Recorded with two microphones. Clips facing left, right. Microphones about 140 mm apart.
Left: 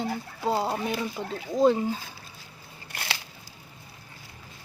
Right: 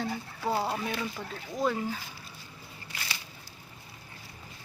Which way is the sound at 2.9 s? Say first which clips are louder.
Left 5 dB; 65° left (ahead or behind).